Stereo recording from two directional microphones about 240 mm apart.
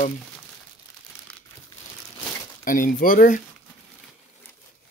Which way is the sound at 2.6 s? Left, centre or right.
Left.